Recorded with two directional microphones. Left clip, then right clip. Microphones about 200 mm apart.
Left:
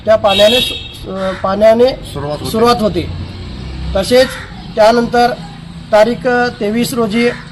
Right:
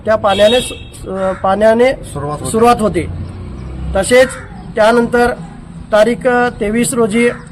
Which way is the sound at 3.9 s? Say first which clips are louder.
Right 1 dB; 30° right (ahead or behind).